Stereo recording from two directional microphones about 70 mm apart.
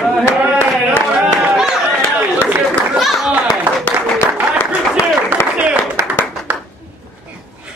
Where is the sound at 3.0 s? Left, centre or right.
Centre.